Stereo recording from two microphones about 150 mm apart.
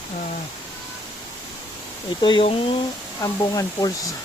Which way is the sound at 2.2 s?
35° left (ahead or behind).